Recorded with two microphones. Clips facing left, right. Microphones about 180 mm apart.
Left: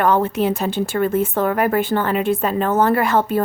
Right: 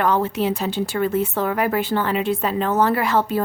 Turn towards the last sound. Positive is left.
turn(degrees=50)  # may be behind; listen again after turning